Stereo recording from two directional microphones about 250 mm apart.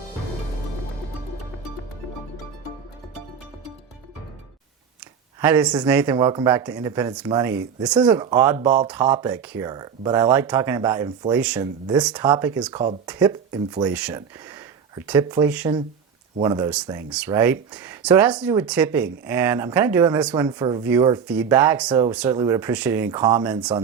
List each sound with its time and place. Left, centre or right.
5.4 s speech: centre
12.7 s speech: centre
13.9 s speech: centre